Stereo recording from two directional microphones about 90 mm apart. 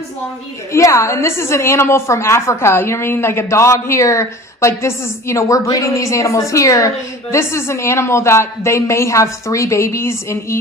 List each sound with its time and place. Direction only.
0.7 s a woman's voice: 35° left (ahead or behind)